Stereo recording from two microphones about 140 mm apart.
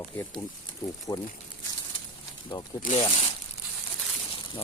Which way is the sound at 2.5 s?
30° left (ahead or behind).